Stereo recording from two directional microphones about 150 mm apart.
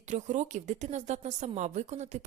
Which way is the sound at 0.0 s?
50° right (ahead or behind).